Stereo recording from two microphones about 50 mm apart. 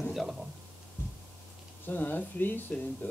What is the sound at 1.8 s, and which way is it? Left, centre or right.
Speech, left.